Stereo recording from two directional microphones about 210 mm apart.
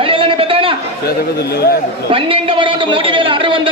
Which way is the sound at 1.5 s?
50° left (ahead or behind).